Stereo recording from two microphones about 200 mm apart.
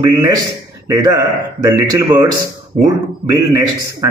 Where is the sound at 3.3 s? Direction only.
20° right (ahead or behind).